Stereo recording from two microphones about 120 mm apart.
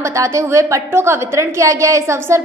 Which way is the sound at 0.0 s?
25° right (ahead or behind).